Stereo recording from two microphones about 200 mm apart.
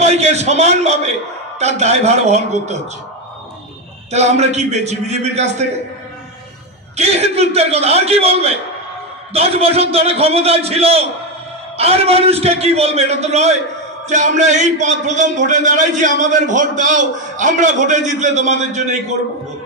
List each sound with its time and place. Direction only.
0.0 s a man's voice: 35° right (ahead or behind)
4.1 s a man's voice: 35° right (ahead or behind)
7.0 s a man's voice: 30° right (ahead or behind)